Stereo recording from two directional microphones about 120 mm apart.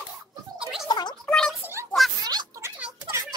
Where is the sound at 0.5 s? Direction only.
5° right (ahead or behind).